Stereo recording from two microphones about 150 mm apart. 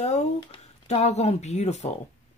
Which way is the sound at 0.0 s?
50° left (ahead or behind).